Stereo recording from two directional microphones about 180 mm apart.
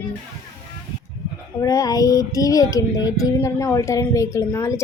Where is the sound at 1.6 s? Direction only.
20° left (ahead or behind).